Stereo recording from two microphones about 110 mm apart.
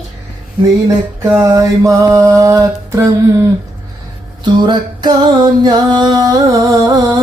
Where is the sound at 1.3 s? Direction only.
30° right (ahead or behind).